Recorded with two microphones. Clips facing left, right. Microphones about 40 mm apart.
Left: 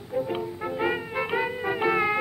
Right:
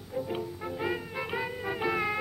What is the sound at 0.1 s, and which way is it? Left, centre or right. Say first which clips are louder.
Music: left 5 dB; left.